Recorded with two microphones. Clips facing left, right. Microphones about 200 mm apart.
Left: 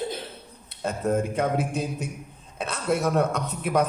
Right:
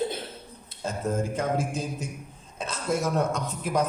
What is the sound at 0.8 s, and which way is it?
A man's voice, 60° left (ahead or behind).